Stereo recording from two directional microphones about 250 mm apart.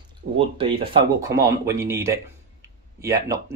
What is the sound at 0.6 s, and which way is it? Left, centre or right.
Speech, right.